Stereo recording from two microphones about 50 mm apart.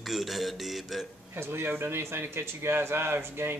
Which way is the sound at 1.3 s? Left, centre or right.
Right.